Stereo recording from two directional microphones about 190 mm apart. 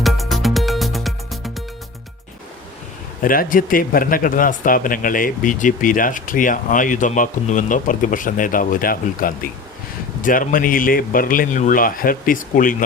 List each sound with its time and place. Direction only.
0.0 s music: centre (ahead or behind)
3.2 s speech: 45° left (ahead or behind)